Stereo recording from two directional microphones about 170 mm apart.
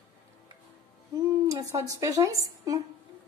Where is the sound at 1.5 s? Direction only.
20° right (ahead or behind).